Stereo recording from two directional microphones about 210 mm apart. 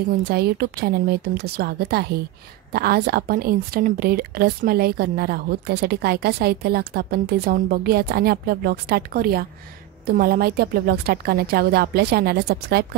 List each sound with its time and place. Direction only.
0.2 s a woman's voice: 50° right (ahead or behind)